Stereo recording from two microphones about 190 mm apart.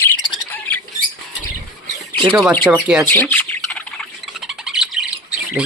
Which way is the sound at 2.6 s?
Centre (ahead or behind).